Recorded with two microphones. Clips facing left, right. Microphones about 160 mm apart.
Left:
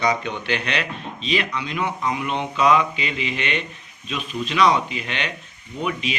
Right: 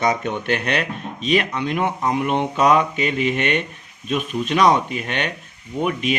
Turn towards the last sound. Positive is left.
turn(degrees=-50)  # may be behind; listen again after turning